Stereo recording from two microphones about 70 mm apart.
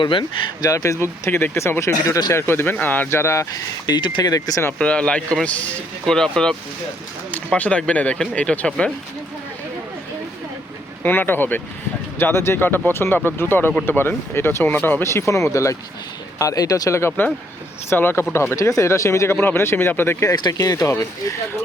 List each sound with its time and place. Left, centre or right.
0.6 s speech: left
2.3 s speech: left
3.5 s speech: left
4.8 s speech: centre
7.3 s speech: left
11.0 s speech: left
15.3 s speech: left
17.2 s speech: left
19.4 s speech: left
20.3 s speech: left
20.6 s speech: left
20.9 s speech: left